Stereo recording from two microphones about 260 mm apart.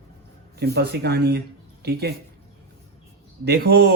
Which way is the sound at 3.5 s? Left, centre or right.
Right.